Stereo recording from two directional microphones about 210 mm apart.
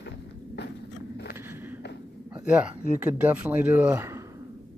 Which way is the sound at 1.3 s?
10° right (ahead or behind).